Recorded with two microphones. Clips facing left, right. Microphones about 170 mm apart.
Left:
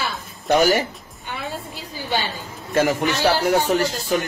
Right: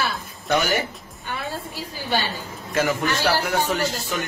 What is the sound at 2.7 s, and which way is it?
Speech, 40° left (ahead or behind).